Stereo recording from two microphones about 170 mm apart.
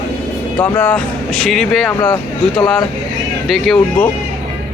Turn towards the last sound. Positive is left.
turn(degrees=5)  # may be behind; listen again after turning